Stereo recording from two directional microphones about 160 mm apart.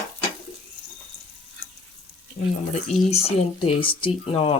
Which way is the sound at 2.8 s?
40° left (ahead or behind).